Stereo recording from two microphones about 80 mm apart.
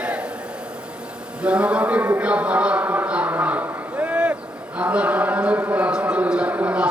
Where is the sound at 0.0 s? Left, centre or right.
Centre.